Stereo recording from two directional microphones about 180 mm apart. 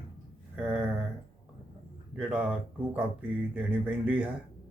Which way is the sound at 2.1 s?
5° right (ahead or behind).